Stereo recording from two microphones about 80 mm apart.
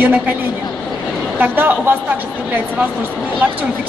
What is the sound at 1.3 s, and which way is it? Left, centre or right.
Speech, right.